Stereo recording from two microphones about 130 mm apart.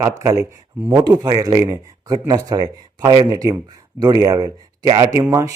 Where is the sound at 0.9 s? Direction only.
35° right (ahead or behind).